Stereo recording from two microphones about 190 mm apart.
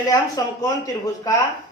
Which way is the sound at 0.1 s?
20° left (ahead or behind).